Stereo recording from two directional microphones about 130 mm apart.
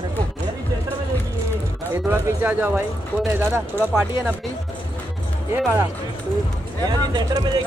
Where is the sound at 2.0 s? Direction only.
20° right (ahead or behind).